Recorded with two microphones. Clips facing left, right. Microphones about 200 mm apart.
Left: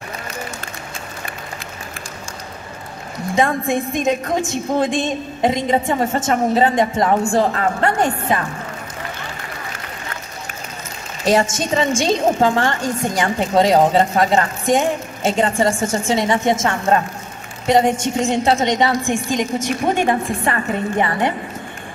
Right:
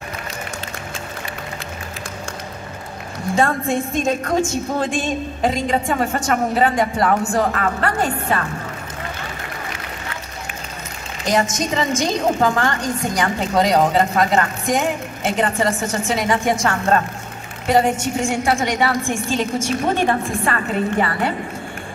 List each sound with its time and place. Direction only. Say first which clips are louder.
3.3 s a woman's voice: left 1 dB; 15° left (ahead or behind)
11.2 s a woman's voice: left 3 dB; 30° left (ahead or behind)